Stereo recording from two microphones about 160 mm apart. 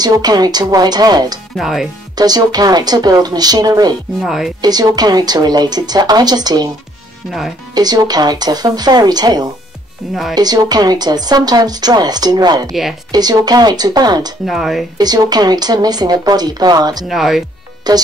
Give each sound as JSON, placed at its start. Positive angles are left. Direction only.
{"t": 0.0, "sound": "a woman's voice", "side_deg": -25}
{"t": 1.6, "sound": "speech", "side_deg": 0}
{"t": 2.1, "sound": "a woman's voice", "side_deg": -25}
{"t": 4.2, "sound": "speech", "side_deg": 0}
{"t": 4.6, "sound": "a woman's voice", "side_deg": -25}
{"t": 7.2, "sound": "speech", "side_deg": 0}
{"t": 7.7, "sound": "a woman's voice", "side_deg": -25}
{"t": 14.4, "sound": "speech", "side_deg": 0}
{"t": 15.0, "sound": "a woman's voice", "side_deg": -25}
{"t": 17.1, "sound": "speech", "side_deg": 0}
{"t": 17.9, "sound": "a woman's voice", "side_deg": -25}